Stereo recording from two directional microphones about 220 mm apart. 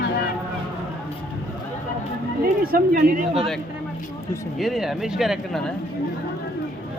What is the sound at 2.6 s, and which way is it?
Speech, 40° right (ahead or behind).